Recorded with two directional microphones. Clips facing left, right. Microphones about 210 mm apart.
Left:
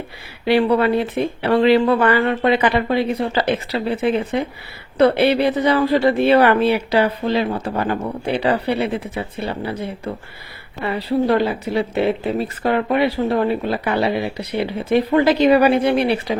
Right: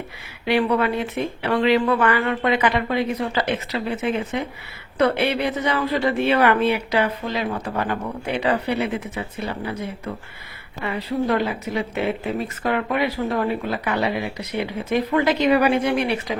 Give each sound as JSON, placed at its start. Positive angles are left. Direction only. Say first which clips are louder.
{"t": 0.4, "sound": "speech", "louder": "left 4 dB", "side_deg": 30}